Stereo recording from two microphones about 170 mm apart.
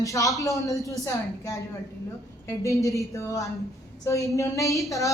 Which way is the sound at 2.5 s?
20° left (ahead or behind).